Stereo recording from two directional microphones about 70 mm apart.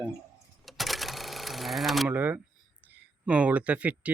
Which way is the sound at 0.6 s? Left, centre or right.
Centre.